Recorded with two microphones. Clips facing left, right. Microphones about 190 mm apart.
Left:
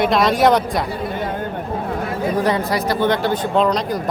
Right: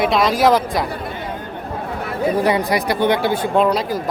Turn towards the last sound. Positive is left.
turn(degrees=-5)  # may be behind; listen again after turning